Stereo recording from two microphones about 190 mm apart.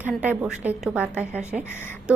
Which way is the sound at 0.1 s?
5° right (ahead or behind).